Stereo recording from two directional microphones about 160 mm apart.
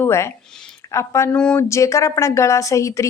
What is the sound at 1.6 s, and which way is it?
Speech, 20° left (ahead or behind).